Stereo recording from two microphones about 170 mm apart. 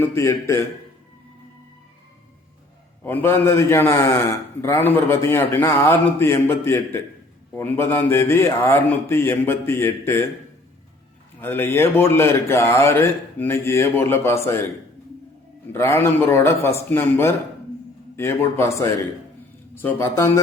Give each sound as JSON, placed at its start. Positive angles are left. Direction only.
{"t": 0.0, "sound": "a man's voice", "side_deg": 15}
{"t": 3.0, "sound": "a man's voice", "side_deg": 10}
{"t": 11.3, "sound": "a man's voice", "side_deg": 15}
{"t": 15.7, "sound": "a man's voice", "side_deg": 15}